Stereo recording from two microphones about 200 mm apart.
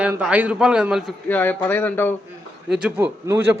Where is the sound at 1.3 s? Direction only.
10° left (ahead or behind).